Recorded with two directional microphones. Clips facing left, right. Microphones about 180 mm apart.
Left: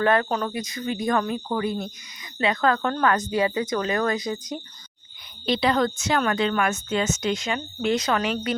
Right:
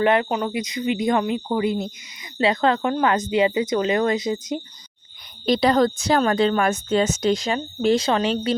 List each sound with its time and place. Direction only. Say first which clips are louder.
0.0 s speech: right 2 dB; 20° right (ahead or behind)
5.5 s a woman's voice: right 4 dB; 40° right (ahead or behind)